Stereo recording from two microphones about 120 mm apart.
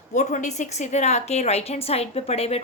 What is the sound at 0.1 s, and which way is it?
A woman's voice, 90° left.